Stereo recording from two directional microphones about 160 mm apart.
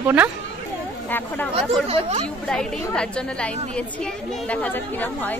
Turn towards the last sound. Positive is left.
turn(degrees=10)  # may be behind; listen again after turning